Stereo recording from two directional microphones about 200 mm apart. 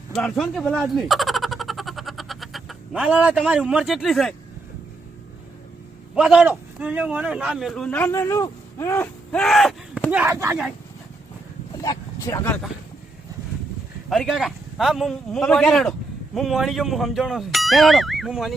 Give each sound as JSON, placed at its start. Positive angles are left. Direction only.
{"t": 0.1, "sound": "a sound", "side_deg": 5}
{"t": 6.1, "sound": "a man's voice", "side_deg": -5}
{"t": 11.8, "sound": "vehicle", "side_deg": 15}
{"t": 14.1, "sound": "a man's voice", "side_deg": 0}